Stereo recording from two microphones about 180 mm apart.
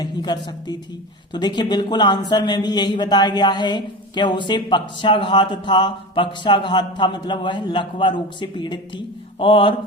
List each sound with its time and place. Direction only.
0.0 s speech: 25° left (ahead or behind)